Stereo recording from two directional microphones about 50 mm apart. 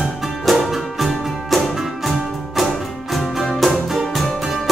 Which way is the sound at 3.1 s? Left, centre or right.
Centre.